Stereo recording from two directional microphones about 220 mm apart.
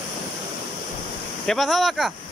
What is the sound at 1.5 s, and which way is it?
Speech, centre (ahead or behind).